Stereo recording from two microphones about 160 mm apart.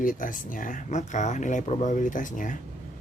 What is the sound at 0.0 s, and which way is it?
Speech, 60° left (ahead or behind).